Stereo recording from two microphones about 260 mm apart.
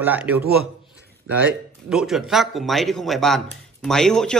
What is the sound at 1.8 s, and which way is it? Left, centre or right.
Speech, centre.